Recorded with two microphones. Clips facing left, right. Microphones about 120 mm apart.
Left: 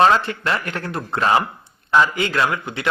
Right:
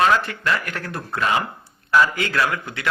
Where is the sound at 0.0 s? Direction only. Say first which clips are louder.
Left 3 dB; 30° left (ahead or behind).